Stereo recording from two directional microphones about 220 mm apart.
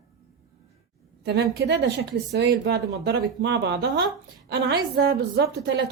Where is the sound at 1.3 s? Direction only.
50° right (ahead or behind).